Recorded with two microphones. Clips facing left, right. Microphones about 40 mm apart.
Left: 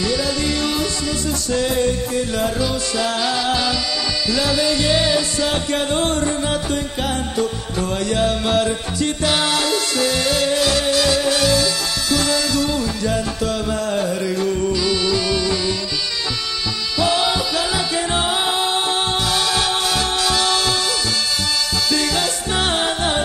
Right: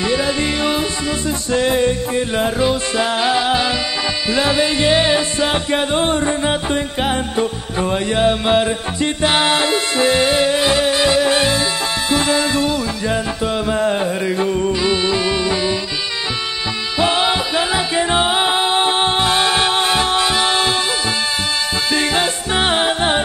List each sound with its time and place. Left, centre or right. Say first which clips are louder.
0.0 s music: right 3 dB; right
17.0 s music: right 2 dB; right
21.9 s music: right 4 dB; right